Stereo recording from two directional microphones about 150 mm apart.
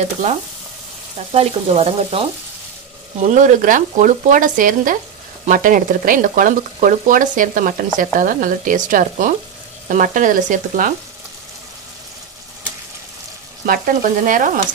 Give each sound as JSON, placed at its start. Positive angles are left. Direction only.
{"t": 0.0, "sound": "frying", "side_deg": -50}
{"t": 3.2, "sound": "speech", "side_deg": -55}
{"t": 13.7, "sound": "speech", "side_deg": -65}